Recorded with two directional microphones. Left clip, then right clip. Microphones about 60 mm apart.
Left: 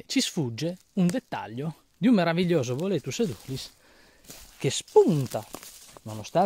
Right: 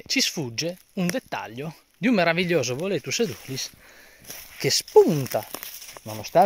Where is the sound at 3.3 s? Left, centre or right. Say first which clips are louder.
Right 6 dB; right.